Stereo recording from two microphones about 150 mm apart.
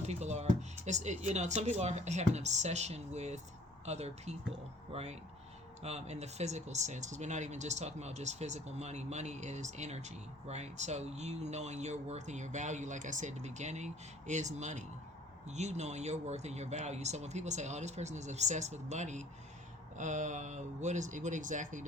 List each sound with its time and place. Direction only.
0.1 s speech: 50° right (ahead or behind)